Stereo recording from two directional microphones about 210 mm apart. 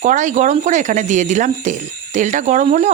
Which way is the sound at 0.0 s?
35° right (ahead or behind).